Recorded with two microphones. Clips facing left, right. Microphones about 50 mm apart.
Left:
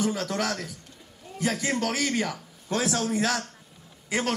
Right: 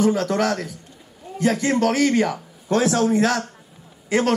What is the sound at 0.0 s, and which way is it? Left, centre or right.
Speech, right.